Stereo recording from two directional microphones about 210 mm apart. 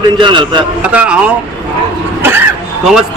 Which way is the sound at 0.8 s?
5° right (ahead or behind).